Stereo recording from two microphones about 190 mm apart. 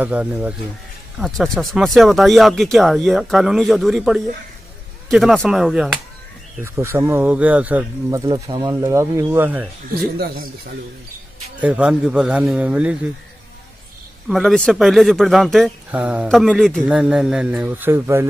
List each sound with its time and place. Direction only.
0.0 s speech: 10° right (ahead or behind)
8.3 s speech: 20° right (ahead or behind)
10.1 s speech: 55° right (ahead or behind)
11.6 s speech: 5° right (ahead or behind)
14.3 s speech: centre (ahead or behind)